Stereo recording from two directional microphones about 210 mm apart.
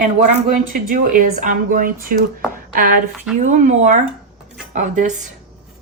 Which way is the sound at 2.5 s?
40° right (ahead or behind).